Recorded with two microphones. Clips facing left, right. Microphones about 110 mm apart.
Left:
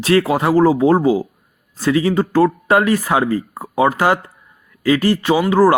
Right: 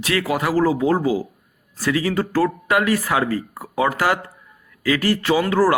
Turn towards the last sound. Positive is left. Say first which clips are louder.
# left 4 dB
turn(degrees=20)  # may be behind; listen again after turning